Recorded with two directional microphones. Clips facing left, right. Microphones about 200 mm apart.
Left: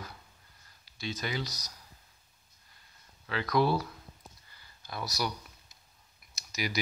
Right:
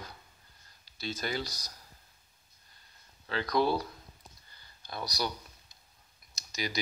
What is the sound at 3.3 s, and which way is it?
Speech, 30° right (ahead or behind).